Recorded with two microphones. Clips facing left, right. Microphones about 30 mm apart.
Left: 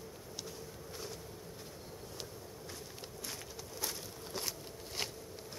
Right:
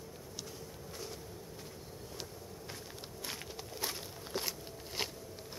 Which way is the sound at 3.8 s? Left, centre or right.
Centre.